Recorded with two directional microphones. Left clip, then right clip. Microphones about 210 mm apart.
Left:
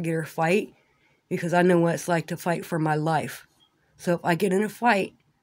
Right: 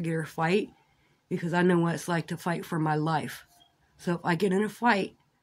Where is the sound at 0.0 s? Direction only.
30° left (ahead or behind).